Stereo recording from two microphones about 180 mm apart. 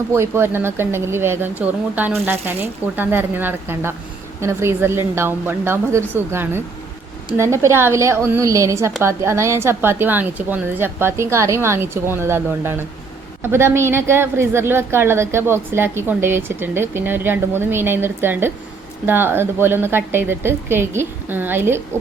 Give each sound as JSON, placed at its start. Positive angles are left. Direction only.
{"t": 0.1, "sound": "a woman's voice", "side_deg": -15}